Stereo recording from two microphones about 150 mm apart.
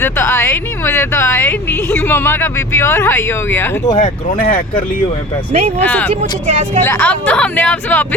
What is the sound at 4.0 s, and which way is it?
Speech, 65° left (ahead or behind).